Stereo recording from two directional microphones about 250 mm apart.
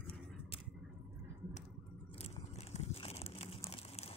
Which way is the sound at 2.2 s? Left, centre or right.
Left.